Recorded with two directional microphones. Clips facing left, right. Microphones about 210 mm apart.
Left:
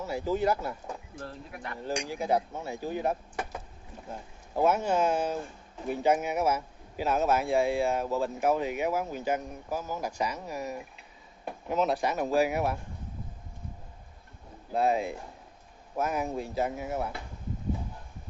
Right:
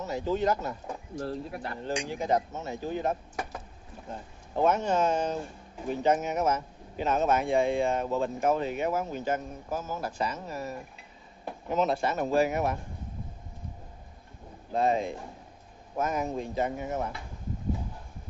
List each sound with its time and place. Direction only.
0.0 s speech: 10° left (ahead or behind)
1.2 s speech: 35° right (ahead or behind)
1.8 s speech: 10° left (ahead or behind)
14.7 s speech: 5° left (ahead or behind)